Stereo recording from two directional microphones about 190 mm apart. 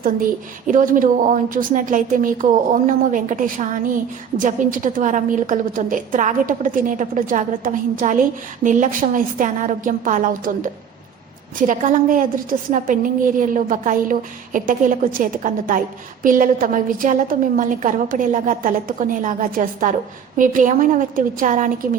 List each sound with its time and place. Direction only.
0.7 s a woman's voice: 45° right (ahead or behind)